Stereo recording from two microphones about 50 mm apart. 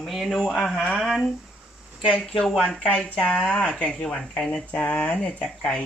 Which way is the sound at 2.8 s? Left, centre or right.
Left.